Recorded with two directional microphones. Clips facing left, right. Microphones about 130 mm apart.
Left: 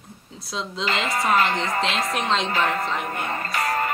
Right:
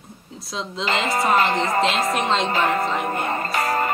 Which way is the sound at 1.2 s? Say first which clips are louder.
Right 2 dB; centre (ahead or behind).